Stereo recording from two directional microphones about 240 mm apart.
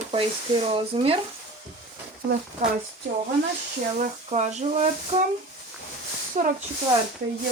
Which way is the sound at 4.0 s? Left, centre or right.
Right.